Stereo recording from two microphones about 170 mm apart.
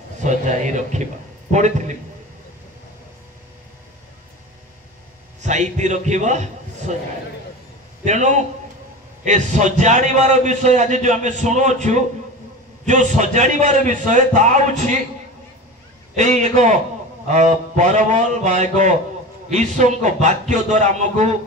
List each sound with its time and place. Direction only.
0.2 s a man's voice: 45° right (ahead or behind)
5.4 s a man's voice: 45° right (ahead or behind)
8.0 s a man's voice: 45° right (ahead or behind)
16.2 s a man's voice: 45° right (ahead or behind)